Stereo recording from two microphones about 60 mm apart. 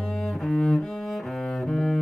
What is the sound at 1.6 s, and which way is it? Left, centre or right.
Double bass, centre.